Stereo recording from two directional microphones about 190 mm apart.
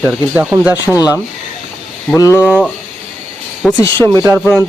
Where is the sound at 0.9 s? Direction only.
15° left (ahead or behind).